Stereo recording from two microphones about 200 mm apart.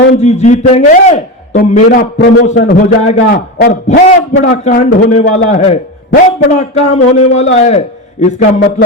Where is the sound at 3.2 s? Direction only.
45° left (ahead or behind).